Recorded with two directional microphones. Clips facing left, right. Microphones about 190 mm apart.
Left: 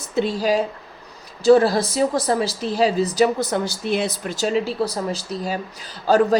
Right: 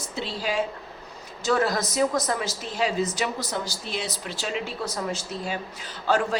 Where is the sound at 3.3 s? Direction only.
60° left (ahead or behind); by 6.3 s 40° left (ahead or behind).